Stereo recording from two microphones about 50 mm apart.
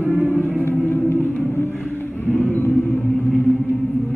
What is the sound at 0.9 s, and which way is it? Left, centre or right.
Music, left.